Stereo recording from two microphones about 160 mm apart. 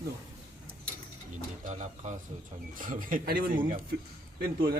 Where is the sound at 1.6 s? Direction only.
45° right (ahead or behind).